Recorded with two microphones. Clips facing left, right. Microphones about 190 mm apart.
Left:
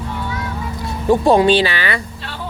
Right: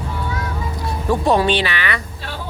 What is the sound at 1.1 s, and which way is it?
Speech, 30° left (ahead or behind).